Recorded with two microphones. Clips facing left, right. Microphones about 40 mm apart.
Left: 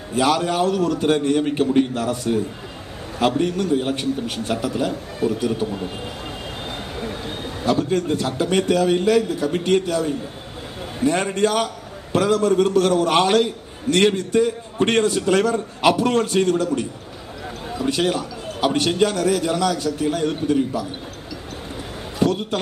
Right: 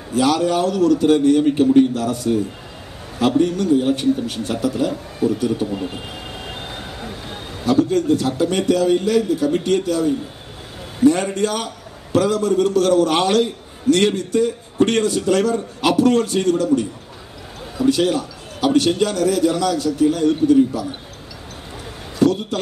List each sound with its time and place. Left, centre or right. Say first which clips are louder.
0.1 s a man's voice: right 2 dB; left
3.3 s a man's voice: right 4 dB; left
7.6 s a man's voice: right 4 dB; left
17.8 s a man's voice: right 4 dB; left
22.2 s a man's voice: right 3 dB; left